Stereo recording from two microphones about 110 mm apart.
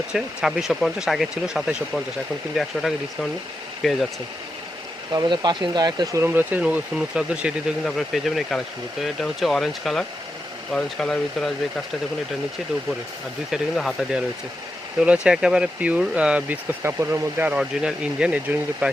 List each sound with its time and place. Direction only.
0.1 s speech: 5° right (ahead or behind)
5.1 s speech: 40° right (ahead or behind)
6.2 s speech: 15° right (ahead or behind); by 11.5 s 5° left (ahead or behind)
13.5 s speech: centre (ahead or behind)
16.8 s speech: 25° right (ahead or behind)
17.6 s speech: 5° right (ahead or behind)